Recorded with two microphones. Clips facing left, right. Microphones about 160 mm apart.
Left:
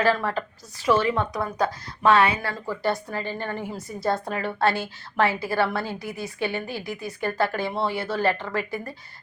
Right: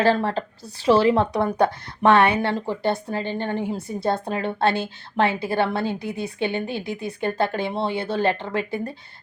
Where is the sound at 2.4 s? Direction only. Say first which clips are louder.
Right 4 dB; 25° right (ahead or behind).